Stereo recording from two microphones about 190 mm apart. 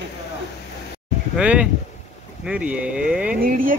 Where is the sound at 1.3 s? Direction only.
5° right (ahead or behind).